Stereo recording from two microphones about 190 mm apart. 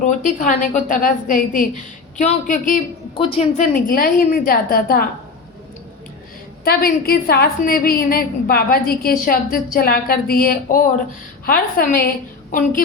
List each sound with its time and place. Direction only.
0.0 s a woman's voice: 40° left (ahead or behind)
3.2 s a woman's voice: 30° left (ahead or behind)
3.6 s a woman's voice: 45° left (ahead or behind)
6.7 s a woman's voice: 55° left (ahead or behind)